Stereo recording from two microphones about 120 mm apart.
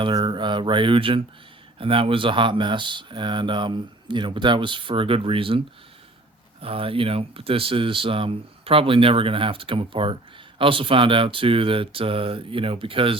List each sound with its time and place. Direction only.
0.0 s speech: 40° right (ahead or behind)